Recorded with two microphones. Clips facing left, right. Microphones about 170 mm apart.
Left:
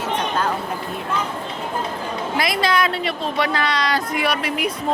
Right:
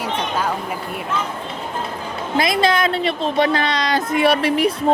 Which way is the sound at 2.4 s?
25° right (ahead or behind).